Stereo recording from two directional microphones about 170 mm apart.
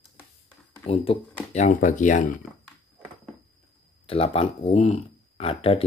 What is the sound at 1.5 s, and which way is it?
Speech, 45° left (ahead or behind).